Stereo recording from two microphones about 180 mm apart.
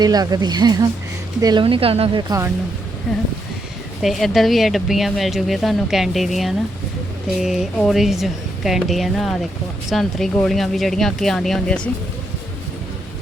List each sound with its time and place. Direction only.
0.0 s speech: 20° right (ahead or behind)
1.6 s speech: 30° right (ahead or behind)
3.1 s speech: 5° left (ahead or behind)